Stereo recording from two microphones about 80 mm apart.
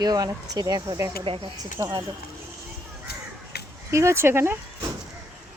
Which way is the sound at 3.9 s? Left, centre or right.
Right.